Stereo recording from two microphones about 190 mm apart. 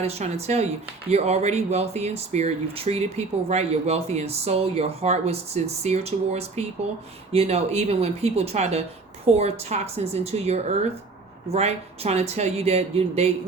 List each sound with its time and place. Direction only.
0.0 s speech: 35° right (ahead or behind)